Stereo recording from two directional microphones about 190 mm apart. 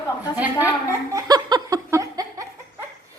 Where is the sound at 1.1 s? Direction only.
20° right (ahead or behind).